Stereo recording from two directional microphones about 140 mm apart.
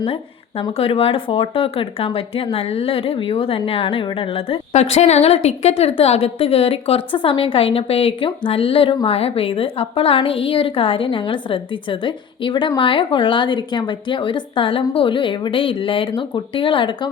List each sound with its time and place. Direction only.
0.8 s a woman's voice: 40° left (ahead or behind)